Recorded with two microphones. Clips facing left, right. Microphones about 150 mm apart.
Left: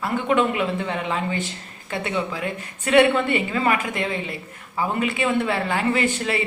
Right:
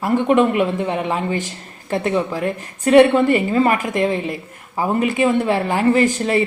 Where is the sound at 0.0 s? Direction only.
40° right (ahead or behind).